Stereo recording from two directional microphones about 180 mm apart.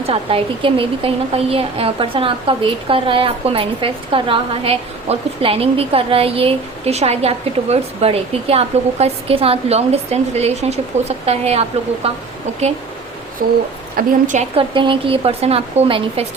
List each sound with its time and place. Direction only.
0.0 s a woman's voice: 30° right (ahead or behind)
13.4 s speech: 55° right (ahead or behind)
13.9 s a woman's voice: 45° right (ahead or behind)
14.5 s a woman's voice: 30° right (ahead or behind)